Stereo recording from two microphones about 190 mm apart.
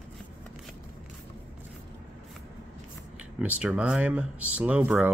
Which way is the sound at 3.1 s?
5° right (ahead or behind).